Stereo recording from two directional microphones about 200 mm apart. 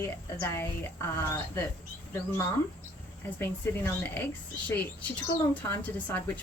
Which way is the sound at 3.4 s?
10° left (ahead or behind).